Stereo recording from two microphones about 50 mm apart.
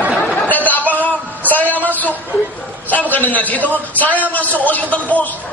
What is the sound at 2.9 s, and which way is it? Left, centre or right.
A man's voice, left.